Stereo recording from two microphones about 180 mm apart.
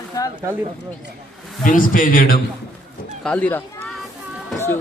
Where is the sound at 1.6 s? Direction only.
50° left (ahead or behind).